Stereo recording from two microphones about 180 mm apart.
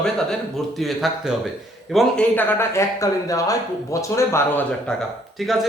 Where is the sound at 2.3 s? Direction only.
10° left (ahead or behind).